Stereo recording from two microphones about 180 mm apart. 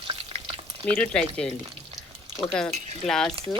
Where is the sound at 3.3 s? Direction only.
30° right (ahead or behind).